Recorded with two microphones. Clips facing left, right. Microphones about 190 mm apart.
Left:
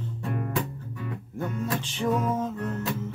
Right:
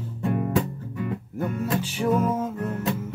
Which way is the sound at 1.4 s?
10° right (ahead or behind).